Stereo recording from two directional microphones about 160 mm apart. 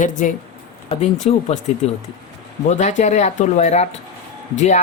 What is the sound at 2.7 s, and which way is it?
Speech, 50° left (ahead or behind).